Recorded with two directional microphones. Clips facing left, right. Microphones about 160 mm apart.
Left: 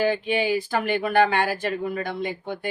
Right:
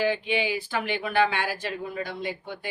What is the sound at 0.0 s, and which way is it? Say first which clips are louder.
Speech: left 3 dB; 45° left (ahead or behind).